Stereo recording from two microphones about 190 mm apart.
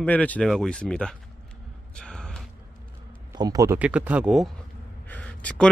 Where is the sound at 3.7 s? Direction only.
5° right (ahead or behind).